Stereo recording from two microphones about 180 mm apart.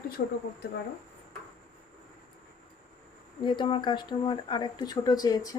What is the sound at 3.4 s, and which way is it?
Speech, 25° left (ahead or behind).